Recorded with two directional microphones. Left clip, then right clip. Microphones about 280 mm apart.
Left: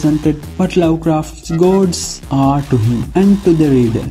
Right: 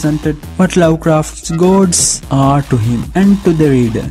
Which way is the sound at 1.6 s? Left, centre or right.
Right.